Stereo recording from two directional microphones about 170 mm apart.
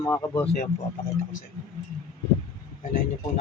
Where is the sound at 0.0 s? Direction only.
15° left (ahead or behind).